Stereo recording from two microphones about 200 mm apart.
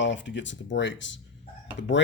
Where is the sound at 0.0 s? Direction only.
65° left (ahead or behind).